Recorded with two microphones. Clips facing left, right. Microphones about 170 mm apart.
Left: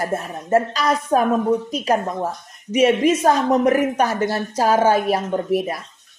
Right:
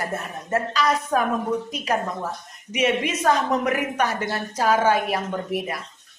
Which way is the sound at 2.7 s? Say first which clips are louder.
Left 7 dB; 35° left (ahead or behind).